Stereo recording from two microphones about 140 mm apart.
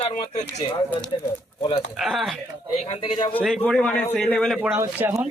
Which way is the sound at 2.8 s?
45° left (ahead or behind).